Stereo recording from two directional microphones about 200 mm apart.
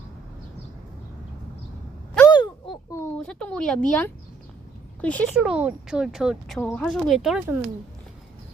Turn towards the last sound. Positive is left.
turn(degrees=0)  # may be behind; listen again after turning